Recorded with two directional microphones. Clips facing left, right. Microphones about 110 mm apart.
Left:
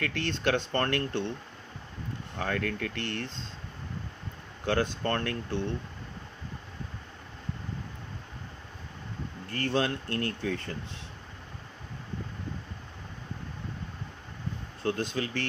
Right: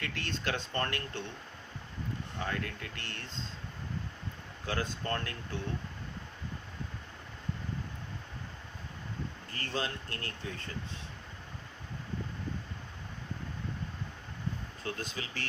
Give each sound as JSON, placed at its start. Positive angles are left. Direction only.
{"t": 0.0, "sound": "speech", "side_deg": 60}
{"t": 2.4, "sound": "speech", "side_deg": 60}
{"t": 4.6, "sound": "speech", "side_deg": 65}
{"t": 9.6, "sound": "speech", "side_deg": 70}
{"t": 14.8, "sound": "speech", "side_deg": 60}